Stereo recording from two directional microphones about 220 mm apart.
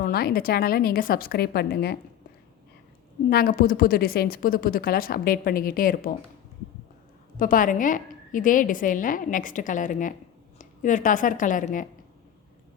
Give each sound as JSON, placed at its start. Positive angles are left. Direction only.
{"t": 0.0, "sound": "a woman's voice", "side_deg": 45}
{"t": 3.2, "sound": "a woman's voice", "side_deg": 45}
{"t": 7.3, "sound": "a woman's voice", "side_deg": 40}